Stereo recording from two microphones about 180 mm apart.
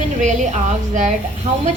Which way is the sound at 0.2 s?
40° right (ahead or behind).